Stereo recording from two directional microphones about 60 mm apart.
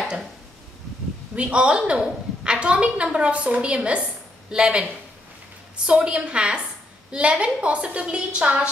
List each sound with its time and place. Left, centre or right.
1.3 s a woman's voice: centre
5.9 s a woman's voice: centre